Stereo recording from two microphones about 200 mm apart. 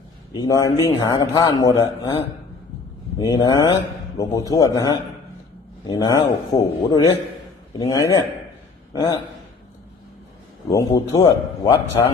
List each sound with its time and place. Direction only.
0.3 s a man's voice: 15° left (ahead or behind)
10.7 s speech: 15° left (ahead or behind)
11.1 s a man's voice: 25° left (ahead or behind)